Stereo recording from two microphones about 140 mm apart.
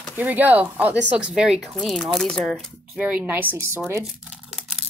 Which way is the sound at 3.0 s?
10° right (ahead or behind).